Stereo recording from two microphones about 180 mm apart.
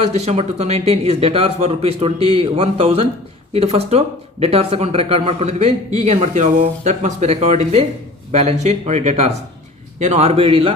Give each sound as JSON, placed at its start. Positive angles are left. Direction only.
{"t": 0.1, "sound": "speech", "side_deg": -35}